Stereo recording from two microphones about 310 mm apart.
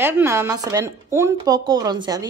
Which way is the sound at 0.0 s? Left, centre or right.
Centre.